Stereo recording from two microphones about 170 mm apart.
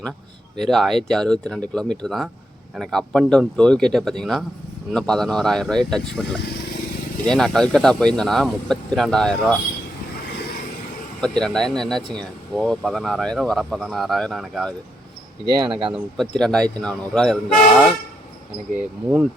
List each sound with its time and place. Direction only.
0.5 s speech: centre (ahead or behind)
11.2 s speech: 5° left (ahead or behind)
15.4 s speech: 30° right (ahead or behind)
16.4 s speech: 5° left (ahead or behind)